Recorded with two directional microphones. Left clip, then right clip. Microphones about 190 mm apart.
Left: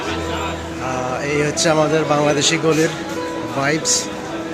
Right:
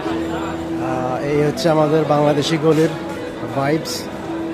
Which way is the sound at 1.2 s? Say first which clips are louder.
Even; 15° right (ahead or behind).